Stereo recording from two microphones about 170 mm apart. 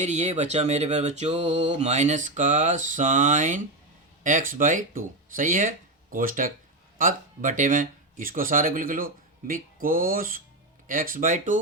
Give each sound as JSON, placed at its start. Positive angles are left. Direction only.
{"t": 0.0, "sound": "speech", "side_deg": -40}